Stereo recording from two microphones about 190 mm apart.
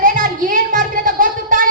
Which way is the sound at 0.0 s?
45° right (ahead or behind).